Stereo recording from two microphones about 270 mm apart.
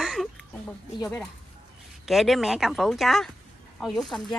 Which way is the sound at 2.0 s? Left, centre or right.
Centre.